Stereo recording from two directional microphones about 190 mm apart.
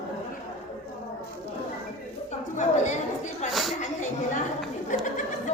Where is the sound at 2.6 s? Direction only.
40° left (ahead or behind).